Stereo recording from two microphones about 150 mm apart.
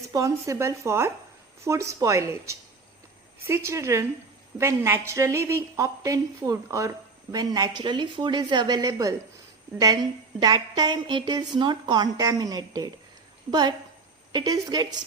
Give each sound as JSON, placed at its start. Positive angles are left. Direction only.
{"t": 0.1, "sound": "a woman's voice", "side_deg": -20}